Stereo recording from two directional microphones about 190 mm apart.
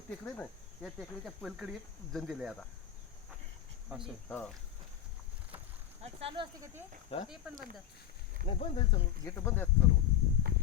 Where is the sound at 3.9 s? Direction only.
Centre (ahead or behind).